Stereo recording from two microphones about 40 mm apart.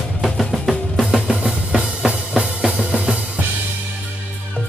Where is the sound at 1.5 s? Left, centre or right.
Right.